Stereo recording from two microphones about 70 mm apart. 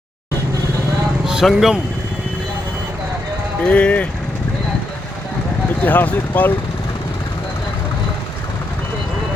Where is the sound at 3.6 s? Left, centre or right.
Centre.